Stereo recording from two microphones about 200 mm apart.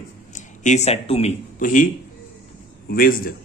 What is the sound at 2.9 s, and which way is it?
Speech, 45° left (ahead or behind).